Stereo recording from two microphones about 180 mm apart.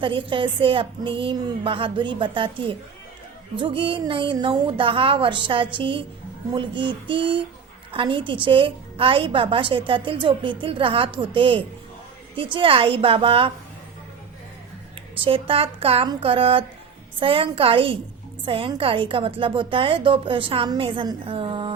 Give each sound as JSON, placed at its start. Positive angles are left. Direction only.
{"t": 0.0, "sound": "a woman's voice", "side_deg": -30}
{"t": 15.2, "sound": "a woman's voice", "side_deg": -30}